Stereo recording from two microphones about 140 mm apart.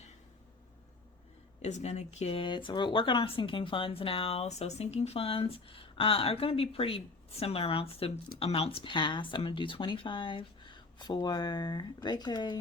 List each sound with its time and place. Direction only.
1.6 s speech: 50° left (ahead or behind); by 12.5 s 30° left (ahead or behind)